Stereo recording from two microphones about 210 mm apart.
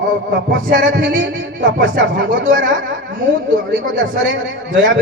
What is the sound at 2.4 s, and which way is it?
Speech, 40° right (ahead or behind).